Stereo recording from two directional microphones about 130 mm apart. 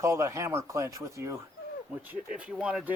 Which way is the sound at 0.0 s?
25° right (ahead or behind).